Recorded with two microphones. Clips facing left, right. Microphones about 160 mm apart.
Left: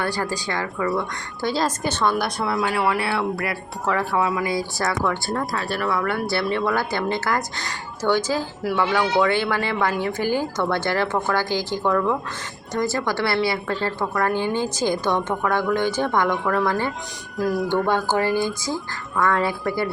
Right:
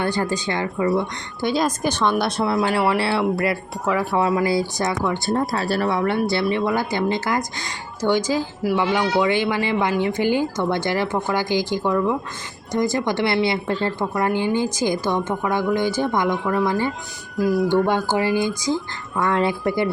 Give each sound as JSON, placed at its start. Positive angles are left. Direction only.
{"t": 0.0, "sound": "a woman's voice", "side_deg": -20}
{"t": 5.9, "sound": "a woman's voice", "side_deg": -20}
{"t": 16.4, "sound": "speech", "side_deg": 0}
{"t": 16.6, "sound": "a woman's voice", "side_deg": -15}
{"t": 17.3, "sound": "speech", "side_deg": 0}
{"t": 17.8, "sound": "a woman's voice", "side_deg": -15}